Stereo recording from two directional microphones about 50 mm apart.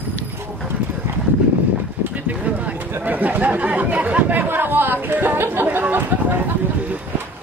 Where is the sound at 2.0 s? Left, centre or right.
Right.